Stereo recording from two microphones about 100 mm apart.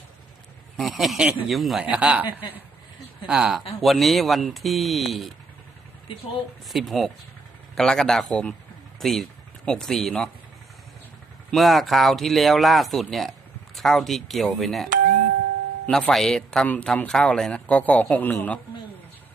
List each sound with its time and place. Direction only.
0.8 s speech: centre (ahead or behind)
1.9 s speech: 10° right (ahead or behind)
3.2 s speech: 5° right (ahead or behind)
6.7 s speech: centre (ahead or behind)
11.5 s speech: centre (ahead or behind)
15.9 s speech: 5° left (ahead or behind)